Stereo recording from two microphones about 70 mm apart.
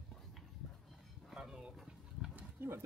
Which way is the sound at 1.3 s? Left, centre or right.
Centre.